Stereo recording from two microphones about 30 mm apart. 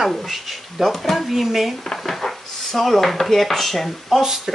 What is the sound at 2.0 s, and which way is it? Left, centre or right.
A woman's voice, centre.